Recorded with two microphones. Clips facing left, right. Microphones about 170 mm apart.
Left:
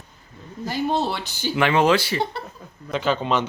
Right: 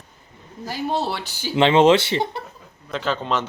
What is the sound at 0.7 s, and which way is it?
Speech, 5° right (ahead or behind).